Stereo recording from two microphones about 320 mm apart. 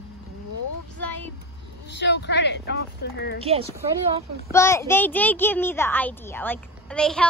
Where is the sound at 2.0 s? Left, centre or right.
Left.